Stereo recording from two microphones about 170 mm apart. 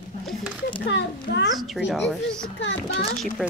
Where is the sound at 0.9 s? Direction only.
90° left.